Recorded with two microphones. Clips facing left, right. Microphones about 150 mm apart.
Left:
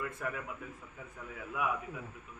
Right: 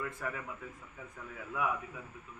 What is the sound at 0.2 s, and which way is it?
Speech, 10° left (ahead or behind).